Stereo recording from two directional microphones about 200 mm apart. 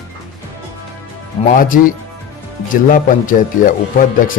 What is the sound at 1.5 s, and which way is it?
A man's voice, 45° left (ahead or behind).